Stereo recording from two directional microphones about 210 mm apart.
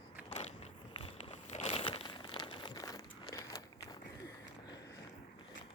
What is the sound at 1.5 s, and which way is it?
Crumpling, 30° left (ahead or behind).